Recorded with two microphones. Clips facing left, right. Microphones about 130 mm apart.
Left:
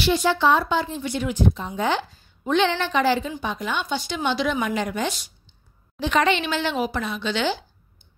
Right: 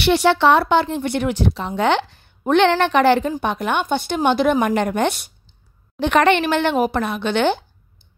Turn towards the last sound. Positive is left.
turn(degrees=-55)  # may be behind; listen again after turning